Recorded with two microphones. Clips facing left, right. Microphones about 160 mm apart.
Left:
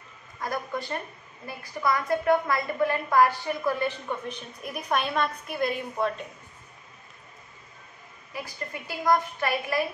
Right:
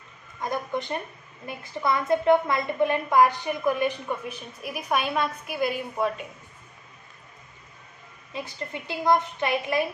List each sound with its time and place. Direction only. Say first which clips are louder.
0.4 s a woman's voice: right 2 dB; 20° right (ahead or behind)
8.3 s a woman's voice: right 2 dB; 25° right (ahead or behind)